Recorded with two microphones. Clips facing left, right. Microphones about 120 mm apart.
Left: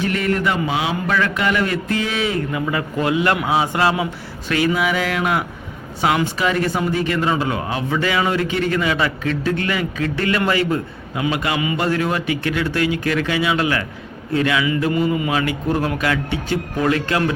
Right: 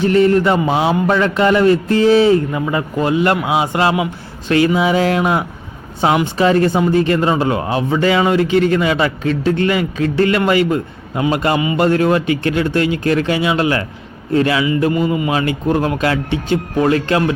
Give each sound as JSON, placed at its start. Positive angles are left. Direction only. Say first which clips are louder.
{"t": 0.0, "sound": "a man's voice", "louder": "right 8 dB", "side_deg": -30}
{"t": 3.4, "sound": "a man's voice", "louder": "right 2 dB", "side_deg": -15}
{"t": 11.1, "sound": "a man's voice", "louder": "right 5 dB", "side_deg": -40}